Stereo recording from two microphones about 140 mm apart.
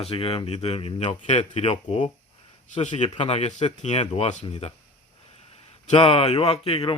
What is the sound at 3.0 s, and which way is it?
Speech, 45° left (ahead or behind).